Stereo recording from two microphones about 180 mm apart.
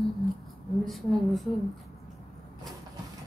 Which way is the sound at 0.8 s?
Centre (ahead or behind).